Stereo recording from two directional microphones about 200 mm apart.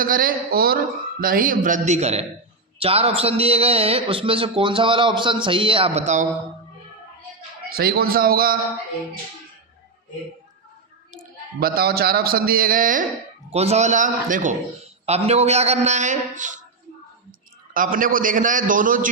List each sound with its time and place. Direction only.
0.0 s a man's voice: 45° right (ahead or behind)
7.7 s a man's voice: 50° right (ahead or behind)
11.1 s a man's voice: 45° right (ahead or behind)
13.5 s a man's voice: 30° right (ahead or behind)
17.7 s a man's voice: 45° right (ahead or behind)